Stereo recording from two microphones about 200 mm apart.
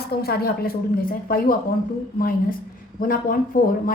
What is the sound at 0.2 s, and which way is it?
A woman's voice, 50° left (ahead or behind).